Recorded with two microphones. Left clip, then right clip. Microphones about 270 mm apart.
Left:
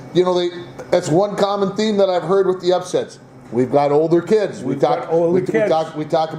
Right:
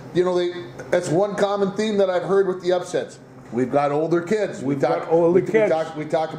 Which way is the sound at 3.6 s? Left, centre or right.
Left.